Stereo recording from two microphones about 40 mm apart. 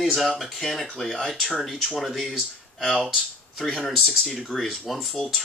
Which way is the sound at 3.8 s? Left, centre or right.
Centre.